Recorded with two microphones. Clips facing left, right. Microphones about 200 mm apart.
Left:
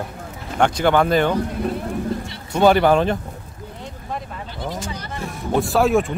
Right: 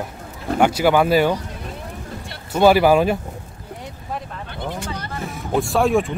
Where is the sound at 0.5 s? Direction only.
5° right (ahead or behind).